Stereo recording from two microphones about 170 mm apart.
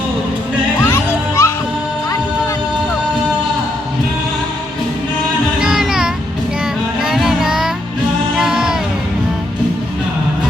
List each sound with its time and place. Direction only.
0.9 s music: 15° left (ahead or behind)
5.5 s music: 5° right (ahead or behind)
7.0 s child singing: centre (ahead or behind)
8.4 s music: 5° right (ahead or behind)